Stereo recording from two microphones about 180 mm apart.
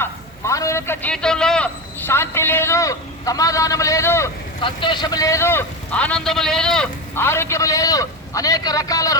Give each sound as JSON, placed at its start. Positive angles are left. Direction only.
{"t": 0.0, "sound": "a man's voice", "side_deg": 15}
{"t": 4.6, "sound": "a man's voice", "side_deg": 25}